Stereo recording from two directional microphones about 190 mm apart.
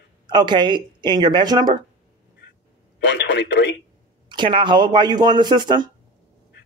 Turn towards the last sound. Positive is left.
turn(degrees=-25)  # may be behind; listen again after turning